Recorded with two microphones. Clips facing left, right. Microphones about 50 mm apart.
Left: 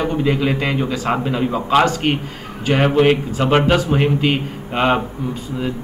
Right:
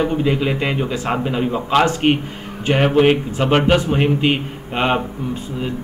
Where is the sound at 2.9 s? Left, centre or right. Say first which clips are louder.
Right 1 dB; centre.